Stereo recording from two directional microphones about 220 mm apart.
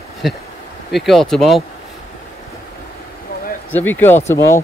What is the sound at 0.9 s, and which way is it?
Speech, centre (ahead or behind).